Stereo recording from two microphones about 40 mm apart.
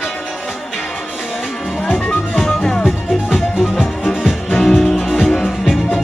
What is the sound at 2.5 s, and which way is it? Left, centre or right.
Music, left.